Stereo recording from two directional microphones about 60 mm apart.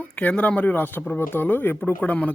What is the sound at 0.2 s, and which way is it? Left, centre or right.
Speech, left.